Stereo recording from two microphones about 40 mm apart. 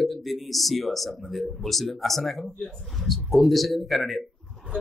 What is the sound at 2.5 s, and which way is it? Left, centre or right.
Speech, centre.